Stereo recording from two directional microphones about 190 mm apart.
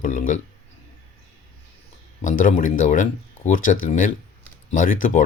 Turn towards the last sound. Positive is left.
turn(degrees=45)  # may be behind; listen again after turning